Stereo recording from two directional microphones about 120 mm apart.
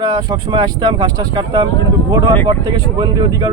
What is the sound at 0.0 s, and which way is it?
Speech, 35° right (ahead or behind).